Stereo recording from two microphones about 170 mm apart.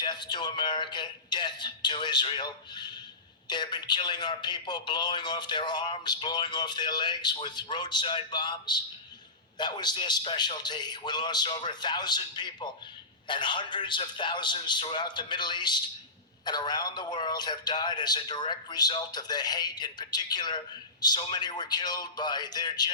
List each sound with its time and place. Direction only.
0.0 s a man's voice: 25° left (ahead or behind)